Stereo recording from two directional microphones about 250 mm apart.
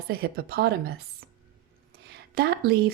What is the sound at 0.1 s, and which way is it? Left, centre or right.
Speech, right.